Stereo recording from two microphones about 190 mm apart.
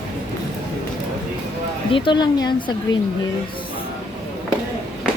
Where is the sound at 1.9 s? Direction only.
25° left (ahead or behind).